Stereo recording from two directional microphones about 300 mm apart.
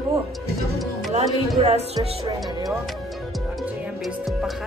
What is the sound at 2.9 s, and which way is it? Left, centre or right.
Music, centre.